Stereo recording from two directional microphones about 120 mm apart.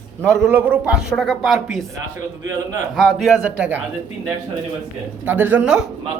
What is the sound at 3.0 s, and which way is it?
Speech, 5° right (ahead or behind).